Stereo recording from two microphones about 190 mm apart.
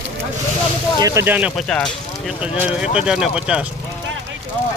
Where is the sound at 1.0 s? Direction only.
15° right (ahead or behind).